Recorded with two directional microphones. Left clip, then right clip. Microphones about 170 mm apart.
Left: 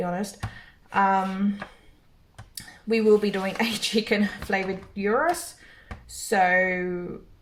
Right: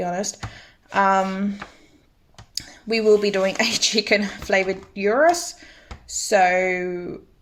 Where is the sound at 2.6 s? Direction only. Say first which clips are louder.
Right 2 dB; 60° right (ahead or behind).